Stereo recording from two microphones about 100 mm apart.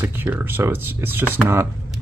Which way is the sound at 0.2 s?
20° right (ahead or behind).